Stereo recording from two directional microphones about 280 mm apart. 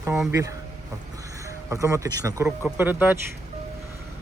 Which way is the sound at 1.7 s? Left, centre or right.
Centre.